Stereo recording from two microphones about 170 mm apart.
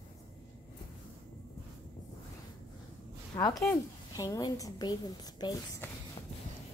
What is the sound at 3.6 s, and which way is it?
A woman's voice, 15° left (ahead or behind).